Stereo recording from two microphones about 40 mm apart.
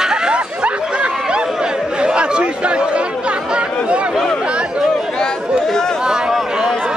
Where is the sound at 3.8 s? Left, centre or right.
Right.